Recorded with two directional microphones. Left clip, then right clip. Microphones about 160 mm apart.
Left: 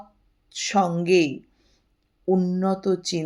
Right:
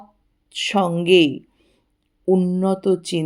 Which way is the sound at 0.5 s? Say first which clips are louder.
Right 2 dB; 30° right (ahead or behind).